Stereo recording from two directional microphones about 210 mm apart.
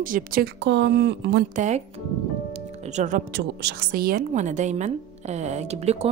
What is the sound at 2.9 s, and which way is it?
Speech, 35° right (ahead or behind).